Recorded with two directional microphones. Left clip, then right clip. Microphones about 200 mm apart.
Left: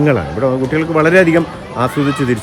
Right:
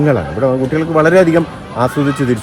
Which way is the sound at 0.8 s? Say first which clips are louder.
Right 1 dB; 5° right (ahead or behind).